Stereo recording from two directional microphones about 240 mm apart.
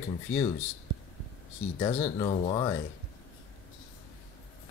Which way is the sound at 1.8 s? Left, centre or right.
Left.